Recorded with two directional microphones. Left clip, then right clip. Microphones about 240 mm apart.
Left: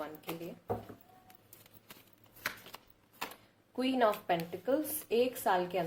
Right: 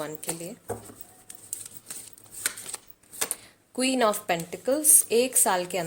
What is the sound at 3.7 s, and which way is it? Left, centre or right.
A woman's voice, right.